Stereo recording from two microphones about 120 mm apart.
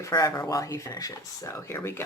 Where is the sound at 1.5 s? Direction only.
20° left (ahead or behind).